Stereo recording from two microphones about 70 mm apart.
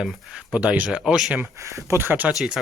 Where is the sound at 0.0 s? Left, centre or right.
Centre.